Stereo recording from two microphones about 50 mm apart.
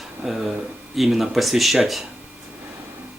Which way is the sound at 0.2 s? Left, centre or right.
Centre.